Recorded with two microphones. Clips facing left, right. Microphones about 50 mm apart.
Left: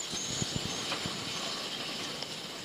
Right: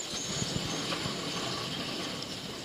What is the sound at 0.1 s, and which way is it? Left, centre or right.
Vehicle, centre.